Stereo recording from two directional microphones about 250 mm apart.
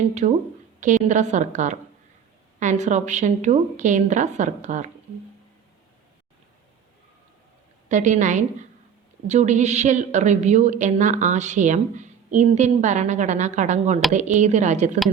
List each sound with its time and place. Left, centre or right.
0.1 s a woman's voice: right
7.9 s a woman's voice: right